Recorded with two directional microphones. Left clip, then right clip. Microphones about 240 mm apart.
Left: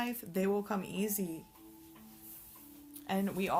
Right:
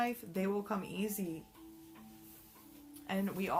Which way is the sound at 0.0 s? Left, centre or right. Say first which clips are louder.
Left 1 dB; left.